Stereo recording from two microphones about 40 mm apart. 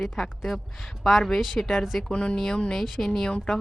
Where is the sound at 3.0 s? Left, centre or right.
Centre.